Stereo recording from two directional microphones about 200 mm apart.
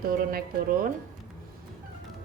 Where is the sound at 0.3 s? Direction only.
45° right (ahead or behind).